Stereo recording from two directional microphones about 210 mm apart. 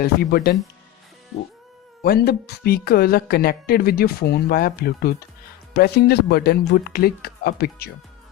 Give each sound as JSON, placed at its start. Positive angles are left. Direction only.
{"t": 0.0, "sound": "speech", "side_deg": 45}
{"t": 2.0, "sound": "speech", "side_deg": 50}